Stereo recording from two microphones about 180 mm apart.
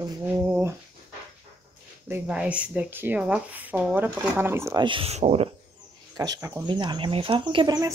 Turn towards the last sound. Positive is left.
turn(degrees=-20)  # may be behind; listen again after turning